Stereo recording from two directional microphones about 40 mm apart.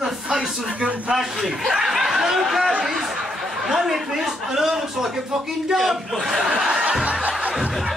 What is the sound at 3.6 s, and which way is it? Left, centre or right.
A man's voice, centre.